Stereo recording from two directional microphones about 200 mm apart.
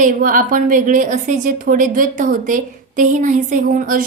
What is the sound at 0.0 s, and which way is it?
A woman's voice, 40° right (ahead or behind).